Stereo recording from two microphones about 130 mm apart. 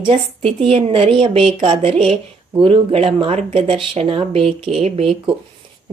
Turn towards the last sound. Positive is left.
turn(degrees=-50)  # may be behind; listen again after turning